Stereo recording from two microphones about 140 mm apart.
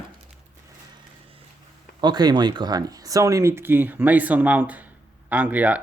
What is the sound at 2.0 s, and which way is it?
Speech, 30° right (ahead or behind).